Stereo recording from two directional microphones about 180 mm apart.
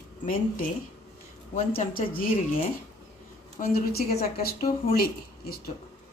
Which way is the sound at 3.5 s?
55° left (ahead or behind).